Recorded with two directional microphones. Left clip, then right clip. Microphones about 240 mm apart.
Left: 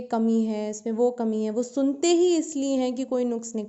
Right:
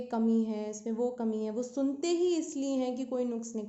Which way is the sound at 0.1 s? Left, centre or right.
Left.